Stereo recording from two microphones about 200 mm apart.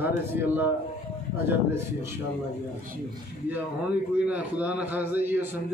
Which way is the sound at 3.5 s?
5° right (ahead or behind).